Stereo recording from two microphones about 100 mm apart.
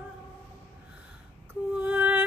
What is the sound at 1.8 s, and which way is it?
Music, 15° right (ahead or behind).